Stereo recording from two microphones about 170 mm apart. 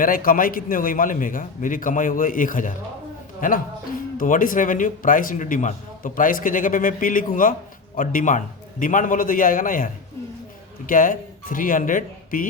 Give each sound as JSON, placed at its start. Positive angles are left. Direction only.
{"t": 0.0, "sound": "speech", "side_deg": 55}